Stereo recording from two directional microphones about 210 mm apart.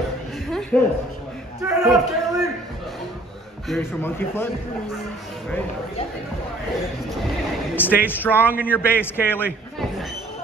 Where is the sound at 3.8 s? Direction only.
10° left (ahead or behind).